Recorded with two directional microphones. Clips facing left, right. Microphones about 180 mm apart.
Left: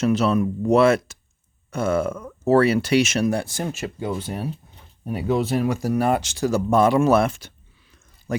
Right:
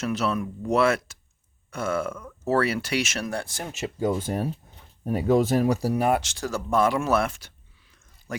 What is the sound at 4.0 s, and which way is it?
Speech, 45° right (ahead or behind).